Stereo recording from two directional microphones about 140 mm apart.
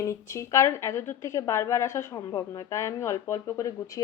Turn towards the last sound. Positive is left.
turn(degrees=20)  # may be behind; listen again after turning